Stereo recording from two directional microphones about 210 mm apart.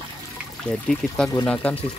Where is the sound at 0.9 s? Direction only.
5° left (ahead or behind).